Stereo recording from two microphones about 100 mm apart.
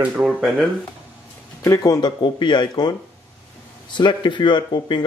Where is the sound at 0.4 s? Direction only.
Centre (ahead or behind).